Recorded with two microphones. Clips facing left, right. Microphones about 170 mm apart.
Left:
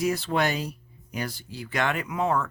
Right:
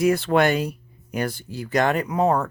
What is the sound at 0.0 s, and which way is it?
Speech, 60° right (ahead or behind).